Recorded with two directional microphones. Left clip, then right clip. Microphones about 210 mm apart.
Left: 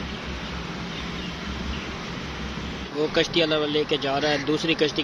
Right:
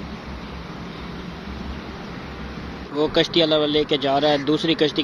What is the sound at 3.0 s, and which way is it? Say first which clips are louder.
Speech: right 4 dB; 20° right (ahead or behind).